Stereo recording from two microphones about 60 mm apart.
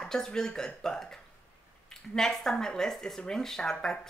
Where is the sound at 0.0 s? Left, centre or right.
Centre.